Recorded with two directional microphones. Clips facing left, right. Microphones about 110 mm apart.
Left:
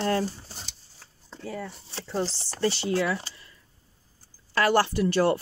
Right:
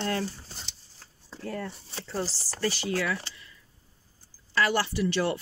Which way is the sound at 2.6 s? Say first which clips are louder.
Left 4 dB; 25° left (ahead or behind).